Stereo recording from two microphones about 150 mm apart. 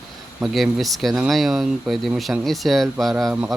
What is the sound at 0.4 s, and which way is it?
Speech, centre (ahead or behind).